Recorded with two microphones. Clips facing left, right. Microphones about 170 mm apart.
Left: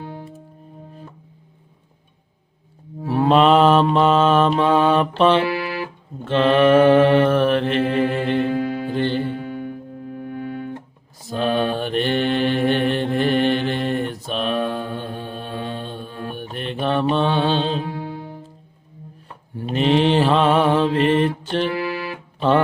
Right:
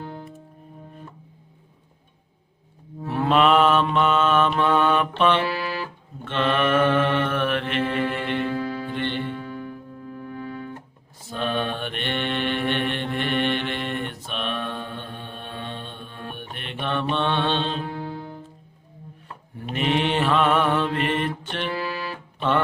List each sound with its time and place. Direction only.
3.1 s mantra: 35° left (ahead or behind); by 10.8 s 50° left (ahead or behind)
11.3 s mantra: 35° left (ahead or behind)
19.5 s mantra: 30° left (ahead or behind)
22.4 s music: 35° left (ahead or behind)